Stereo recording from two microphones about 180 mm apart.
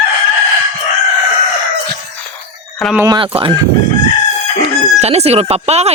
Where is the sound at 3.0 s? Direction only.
25° right (ahead or behind).